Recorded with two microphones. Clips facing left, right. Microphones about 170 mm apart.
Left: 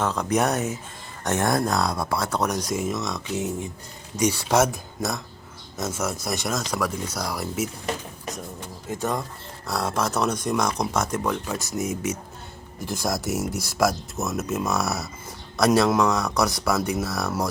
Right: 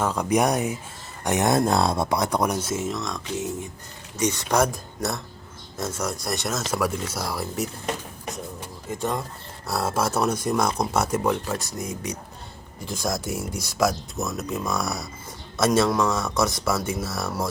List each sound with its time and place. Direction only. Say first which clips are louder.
0.0 s speech: right 1 dB; 10° right (ahead or behind)
4.2 s speech: left 1 dB; 10° left (ahead or behind)
9.0 s speech: even; centre (ahead or behind)